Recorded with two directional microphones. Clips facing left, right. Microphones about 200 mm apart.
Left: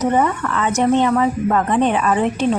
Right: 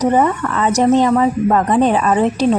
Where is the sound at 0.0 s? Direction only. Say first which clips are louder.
Right 3 dB; 35° right (ahead or behind).